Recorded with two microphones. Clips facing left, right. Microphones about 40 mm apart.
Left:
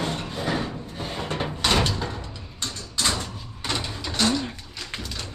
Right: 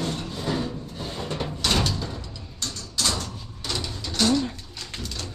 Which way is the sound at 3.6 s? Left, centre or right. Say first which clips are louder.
Left 2 dB; left.